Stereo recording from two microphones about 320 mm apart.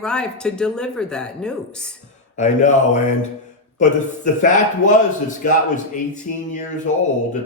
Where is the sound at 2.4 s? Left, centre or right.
Left.